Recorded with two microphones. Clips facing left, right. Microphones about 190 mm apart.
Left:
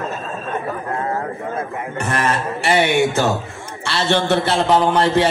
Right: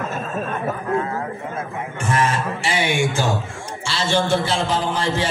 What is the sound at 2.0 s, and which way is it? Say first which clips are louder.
Music: even; 65° left (ahead or behind).